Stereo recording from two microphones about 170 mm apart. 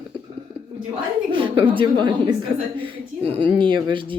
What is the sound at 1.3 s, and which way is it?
Speech, 30° right (ahead or behind).